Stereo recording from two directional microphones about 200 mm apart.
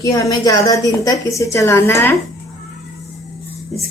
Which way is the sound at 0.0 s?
15° left (ahead or behind).